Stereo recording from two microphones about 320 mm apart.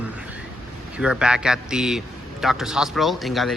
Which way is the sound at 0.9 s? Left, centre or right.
Centre.